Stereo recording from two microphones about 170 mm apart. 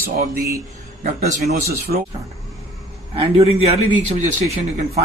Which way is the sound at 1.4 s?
65° right (ahead or behind).